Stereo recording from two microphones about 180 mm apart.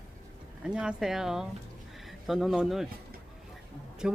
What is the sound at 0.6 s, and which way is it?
Speech, 5° right (ahead or behind).